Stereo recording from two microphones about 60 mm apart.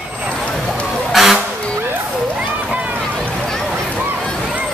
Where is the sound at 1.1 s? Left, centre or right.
Centre.